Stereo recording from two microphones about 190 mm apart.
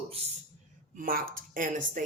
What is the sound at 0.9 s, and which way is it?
Speech, 50° right (ahead or behind).